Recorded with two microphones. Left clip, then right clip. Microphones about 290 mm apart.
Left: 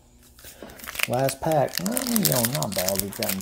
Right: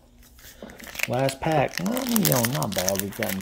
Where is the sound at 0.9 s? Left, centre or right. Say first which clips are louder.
Left 1 dB; centre.